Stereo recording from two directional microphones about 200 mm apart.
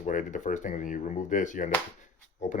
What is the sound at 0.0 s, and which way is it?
Speech, 40° left (ahead or behind).